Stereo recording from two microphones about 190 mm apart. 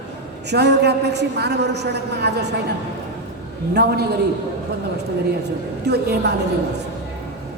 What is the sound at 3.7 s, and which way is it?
Speech, 60° right (ahead or behind).